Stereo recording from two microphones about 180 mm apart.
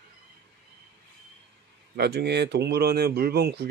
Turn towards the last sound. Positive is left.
turn(degrees=-65)  # may be behind; listen again after turning